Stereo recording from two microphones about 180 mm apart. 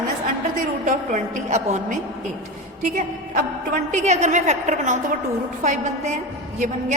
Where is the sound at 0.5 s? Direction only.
45° right (ahead or behind).